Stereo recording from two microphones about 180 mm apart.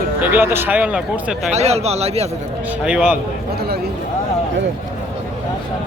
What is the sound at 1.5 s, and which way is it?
Speech, 35° right (ahead or behind).